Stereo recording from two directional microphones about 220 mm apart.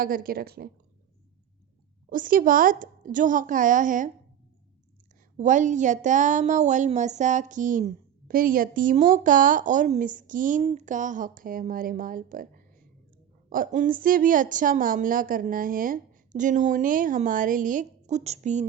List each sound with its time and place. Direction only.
0.0 s speech: 40° right (ahead or behind)
2.0 s a woman's voice: 40° right (ahead or behind)
5.4 s a woman's voice: 35° right (ahead or behind)